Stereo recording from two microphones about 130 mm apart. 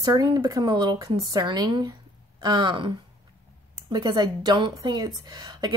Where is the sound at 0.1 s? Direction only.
30° right (ahead or behind).